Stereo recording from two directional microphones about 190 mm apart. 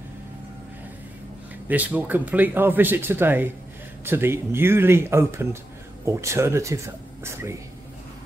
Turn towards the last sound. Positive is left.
turn(degrees=-15)  # may be behind; listen again after turning